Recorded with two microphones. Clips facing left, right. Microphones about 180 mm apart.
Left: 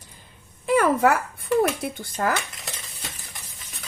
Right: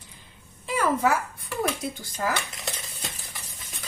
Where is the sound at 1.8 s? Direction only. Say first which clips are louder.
Left 3 dB; 55° left (ahead or behind).